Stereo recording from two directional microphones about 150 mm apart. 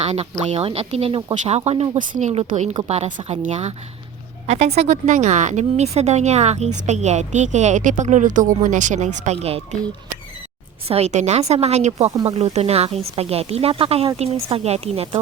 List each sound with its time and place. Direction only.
0.0 s a woman's voice: 45° right (ahead or behind)
10.8 s a woman's voice: 45° right (ahead or behind)